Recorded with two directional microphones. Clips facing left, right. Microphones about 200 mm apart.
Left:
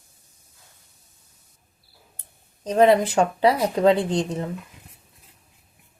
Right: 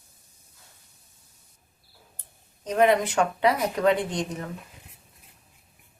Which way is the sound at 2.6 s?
30° left (ahead or behind).